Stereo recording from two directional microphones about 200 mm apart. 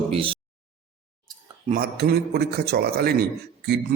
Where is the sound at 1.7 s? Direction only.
50° right (ahead or behind).